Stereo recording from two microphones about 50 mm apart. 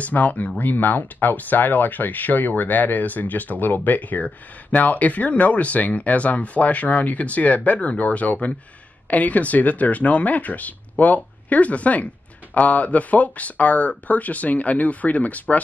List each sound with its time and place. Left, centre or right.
0.0 s speech: left